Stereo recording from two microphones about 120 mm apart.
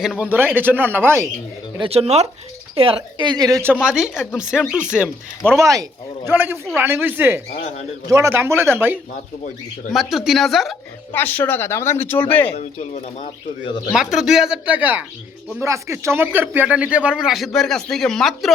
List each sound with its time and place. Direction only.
0.0 s a man's voice: 10° right (ahead or behind)
1.8 s speech: 55° right (ahead or behind)
2.7 s a woman's voice: 50° right (ahead or behind); by 3.6 s 35° right (ahead or behind)
3.8 s speech: 5° right (ahead or behind)
5.4 s speech: 5° left (ahead or behind)
5.6 s speech: 30° right (ahead or behind)
6.3 s a man's voice: 15° right (ahead or behind)
9.9 s speech: centre (ahead or behind)
11.1 s speech: 15° left (ahead or behind)
12.5 s speech: 70° left (ahead or behind)
13.9 s speech: 5° right (ahead or behind)
15.6 s a man's voice: 25° right (ahead or behind); by 18.5 s centre (ahead or behind)